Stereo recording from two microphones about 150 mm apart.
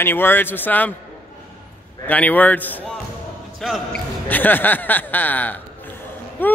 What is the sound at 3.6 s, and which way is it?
Speech, centre (ahead or behind).